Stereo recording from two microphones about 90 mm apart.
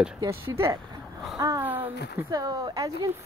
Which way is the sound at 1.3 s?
40° right (ahead or behind).